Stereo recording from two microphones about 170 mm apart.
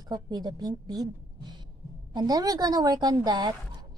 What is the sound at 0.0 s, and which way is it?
A woman's voice, 20° right (ahead or behind).